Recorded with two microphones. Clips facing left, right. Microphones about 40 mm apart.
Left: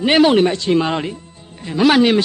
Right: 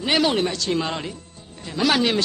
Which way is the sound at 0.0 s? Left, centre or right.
Left.